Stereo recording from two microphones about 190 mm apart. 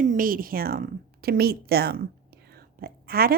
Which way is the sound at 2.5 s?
55° right (ahead or behind).